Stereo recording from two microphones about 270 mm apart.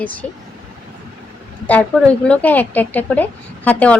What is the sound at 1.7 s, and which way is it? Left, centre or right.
A woman's voice, centre.